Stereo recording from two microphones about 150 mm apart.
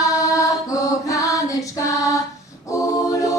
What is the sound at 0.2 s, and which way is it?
Music, 20° left (ahead or behind).